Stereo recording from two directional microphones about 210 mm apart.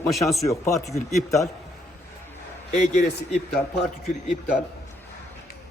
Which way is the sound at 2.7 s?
35° left (ahead or behind).